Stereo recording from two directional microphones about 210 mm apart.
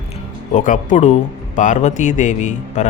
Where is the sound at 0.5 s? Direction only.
35° left (ahead or behind).